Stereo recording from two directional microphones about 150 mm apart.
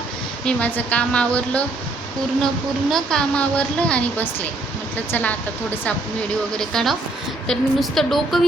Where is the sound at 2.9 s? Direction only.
5° left (ahead or behind).